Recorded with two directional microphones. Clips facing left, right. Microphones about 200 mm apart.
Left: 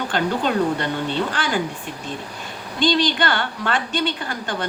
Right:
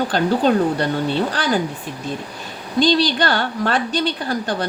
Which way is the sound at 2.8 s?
40° right (ahead or behind).